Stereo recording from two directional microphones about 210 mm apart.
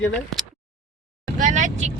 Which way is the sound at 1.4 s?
35° right (ahead or behind).